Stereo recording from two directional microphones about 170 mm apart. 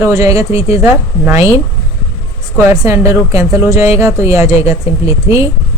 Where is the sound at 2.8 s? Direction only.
20° right (ahead or behind).